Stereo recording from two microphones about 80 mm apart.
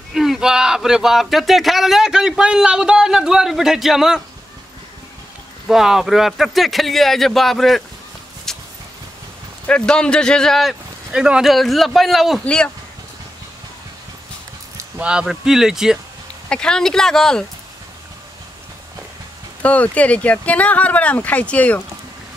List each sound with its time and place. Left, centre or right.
0.1 s speech: centre
5.7 s speech: centre
8.5 s a sound: centre
9.7 s speech: centre
11.1 s speech: centre
11.5 s speech: centre
12.4 s speech: centre
15.0 s speech: centre
16.4 s speech: centre
19.6 s speech: centre